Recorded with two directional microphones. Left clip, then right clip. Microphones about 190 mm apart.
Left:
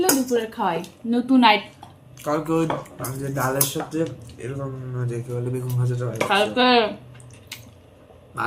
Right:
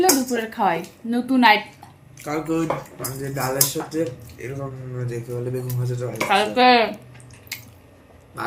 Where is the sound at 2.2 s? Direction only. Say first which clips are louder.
Left 2 dB; 50° left (ahead or behind).